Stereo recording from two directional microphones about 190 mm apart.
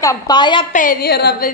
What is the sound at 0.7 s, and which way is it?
Speech, 50° left (ahead or behind).